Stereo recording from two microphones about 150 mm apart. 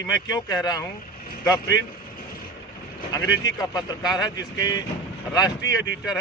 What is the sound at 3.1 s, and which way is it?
Speech, 25° left (ahead or behind).